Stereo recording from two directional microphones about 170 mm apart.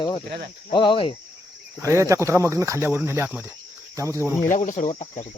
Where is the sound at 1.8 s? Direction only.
15° right (ahead or behind).